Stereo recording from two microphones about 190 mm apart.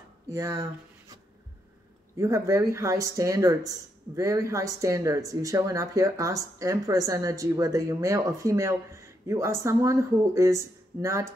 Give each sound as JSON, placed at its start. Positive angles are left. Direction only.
{"t": 0.3, "sound": "speech", "side_deg": -15}